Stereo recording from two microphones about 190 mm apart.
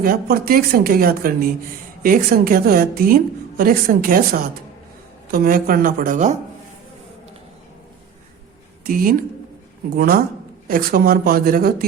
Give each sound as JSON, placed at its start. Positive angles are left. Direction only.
{"t": 0.0, "sound": "a woman's voice", "side_deg": -50}
{"t": 8.8, "sound": "a woman's voice", "side_deg": -50}